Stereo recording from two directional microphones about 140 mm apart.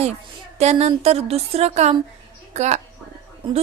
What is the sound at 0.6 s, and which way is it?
A woman's voice, 50° right (ahead or behind).